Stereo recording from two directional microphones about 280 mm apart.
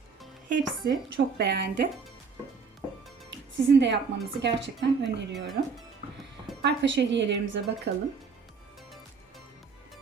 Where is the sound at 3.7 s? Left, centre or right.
Right.